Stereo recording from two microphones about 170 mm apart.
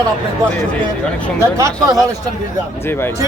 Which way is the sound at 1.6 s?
20° right (ahead or behind).